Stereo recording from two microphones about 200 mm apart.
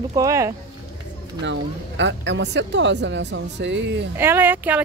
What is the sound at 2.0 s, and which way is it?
Speech, 65° right (ahead or behind).